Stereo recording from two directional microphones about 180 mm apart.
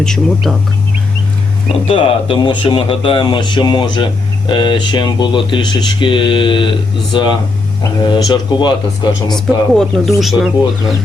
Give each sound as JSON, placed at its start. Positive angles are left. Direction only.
{"t": 0.0, "sound": "speech", "side_deg": 5}
{"t": 1.9, "sound": "speech", "side_deg": 30}
{"t": 9.3, "sound": "speech", "side_deg": 0}